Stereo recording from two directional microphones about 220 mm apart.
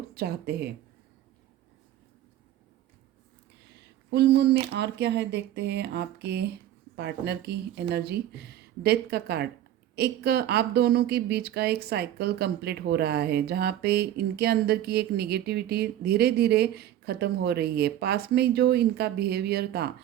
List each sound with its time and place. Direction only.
0.1 s speech: 45° right (ahead or behind)
4.1 s a woman's voice: 50° right (ahead or behind)